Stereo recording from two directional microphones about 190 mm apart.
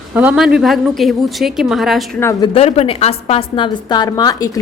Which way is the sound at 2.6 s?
30° left (ahead or behind).